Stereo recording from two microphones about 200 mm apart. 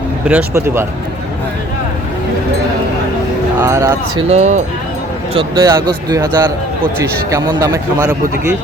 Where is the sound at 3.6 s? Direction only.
15° right (ahead or behind).